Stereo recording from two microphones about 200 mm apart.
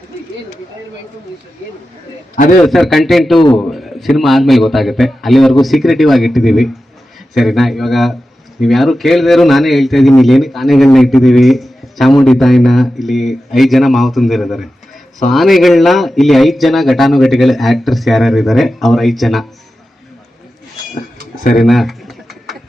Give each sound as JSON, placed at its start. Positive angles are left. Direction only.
{"t": 2.3, "sound": "a man's voice", "side_deg": 40}
{"t": 2.6, "sound": "a man's voice", "side_deg": 0}
{"t": 21.6, "sound": "a sound", "side_deg": 0}